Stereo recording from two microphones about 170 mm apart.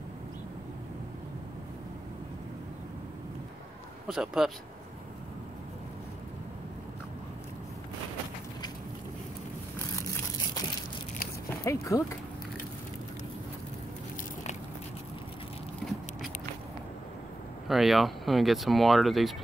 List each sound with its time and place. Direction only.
4.1 s speech: 5° right (ahead or behind)
11.6 s speech: 20° left (ahead or behind)
15.8 s biting: centre (ahead or behind)
17.6 s speech: centre (ahead or behind)